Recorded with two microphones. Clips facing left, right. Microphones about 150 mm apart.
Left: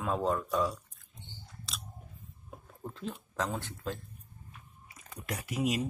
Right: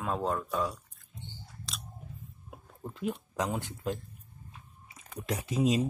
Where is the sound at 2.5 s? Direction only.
10° right (ahead or behind); by 5.8 s 25° right (ahead or behind).